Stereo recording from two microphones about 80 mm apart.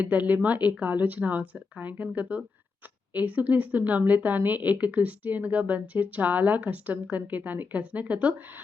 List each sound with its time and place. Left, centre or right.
0.0 s speech: centre